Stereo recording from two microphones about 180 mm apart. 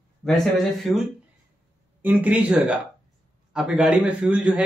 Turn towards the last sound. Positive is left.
turn(degrees=-5)  # may be behind; listen again after turning